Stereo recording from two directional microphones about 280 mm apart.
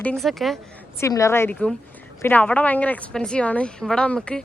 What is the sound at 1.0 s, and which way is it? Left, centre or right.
A woman's voice, centre.